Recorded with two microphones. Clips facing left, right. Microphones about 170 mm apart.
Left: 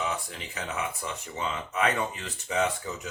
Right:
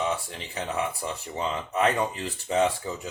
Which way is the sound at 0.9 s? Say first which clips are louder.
Right 3 dB; 35° right (ahead or behind).